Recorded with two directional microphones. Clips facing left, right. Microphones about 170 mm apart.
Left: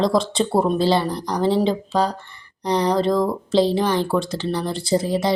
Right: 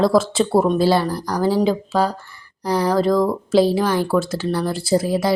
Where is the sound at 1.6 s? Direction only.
5° right (ahead or behind).